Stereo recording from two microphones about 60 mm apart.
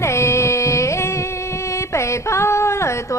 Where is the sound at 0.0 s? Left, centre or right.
Left.